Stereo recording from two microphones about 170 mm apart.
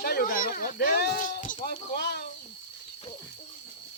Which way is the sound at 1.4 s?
50° left (ahead or behind).